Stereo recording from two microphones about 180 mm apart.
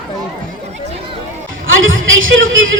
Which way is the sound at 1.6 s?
90° right.